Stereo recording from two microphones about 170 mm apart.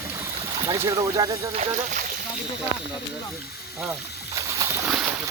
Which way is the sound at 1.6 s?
45° right (ahead or behind).